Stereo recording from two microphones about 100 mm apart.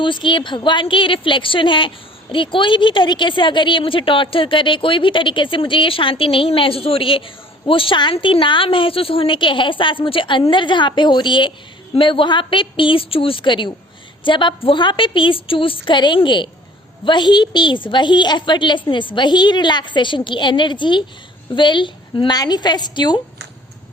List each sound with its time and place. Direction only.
0.0 s a woman's voice: 55° left (ahead or behind)